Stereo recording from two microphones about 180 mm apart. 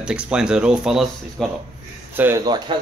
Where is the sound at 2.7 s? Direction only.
30° right (ahead or behind).